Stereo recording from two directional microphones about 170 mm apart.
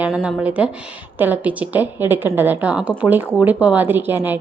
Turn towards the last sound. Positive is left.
turn(degrees=-10)  # may be behind; listen again after turning